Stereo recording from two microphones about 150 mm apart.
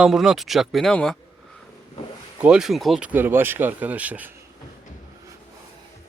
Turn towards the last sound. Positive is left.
turn(degrees=-10)  # may be behind; listen again after turning